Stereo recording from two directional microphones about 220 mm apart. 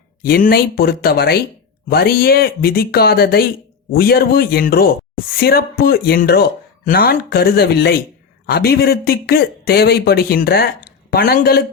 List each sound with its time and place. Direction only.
0.2 s speech: 45° left (ahead or behind)